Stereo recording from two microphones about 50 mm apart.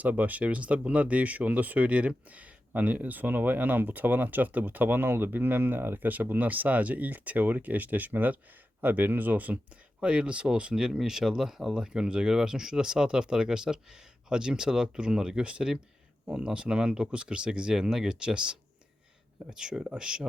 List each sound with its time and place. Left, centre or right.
0.0 s speech: right
10.0 s speech: right
19.5 s speech: centre